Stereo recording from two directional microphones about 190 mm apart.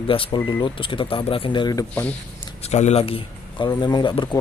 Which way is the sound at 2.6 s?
35° left (ahead or behind).